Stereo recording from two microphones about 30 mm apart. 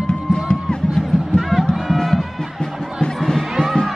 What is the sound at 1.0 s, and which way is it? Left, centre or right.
Music, centre.